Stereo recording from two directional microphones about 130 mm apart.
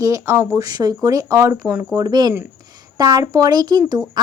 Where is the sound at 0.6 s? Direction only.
30° right (ahead or behind).